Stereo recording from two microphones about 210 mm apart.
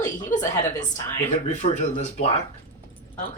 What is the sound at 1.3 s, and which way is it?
Speech, 30° left (ahead or behind).